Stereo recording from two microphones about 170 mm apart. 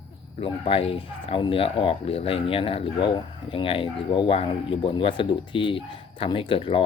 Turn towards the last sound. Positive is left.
turn(degrees=30)  # may be behind; listen again after turning